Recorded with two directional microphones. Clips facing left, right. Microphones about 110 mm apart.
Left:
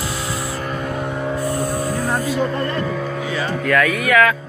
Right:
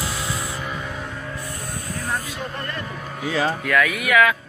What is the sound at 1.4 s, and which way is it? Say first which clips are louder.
Music: left 12 dB; 40° left (ahead or behind).